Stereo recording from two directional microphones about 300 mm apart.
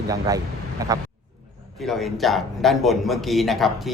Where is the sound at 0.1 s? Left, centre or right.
Centre.